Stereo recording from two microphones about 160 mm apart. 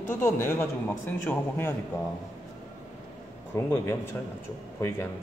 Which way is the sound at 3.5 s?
15° left (ahead or behind).